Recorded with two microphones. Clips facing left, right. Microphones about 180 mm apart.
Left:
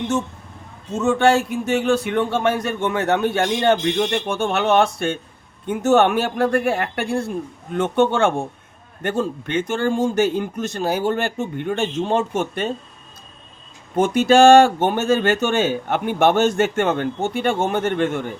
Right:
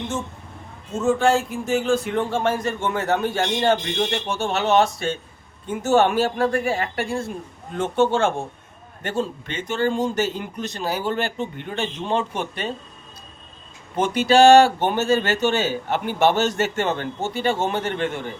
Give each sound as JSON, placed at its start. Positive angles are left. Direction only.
{"t": 1.0, "sound": "a sound", "side_deg": 70}
{"t": 9.0, "sound": "speech", "side_deg": 55}
{"t": 13.9, "sound": "speech", "side_deg": 45}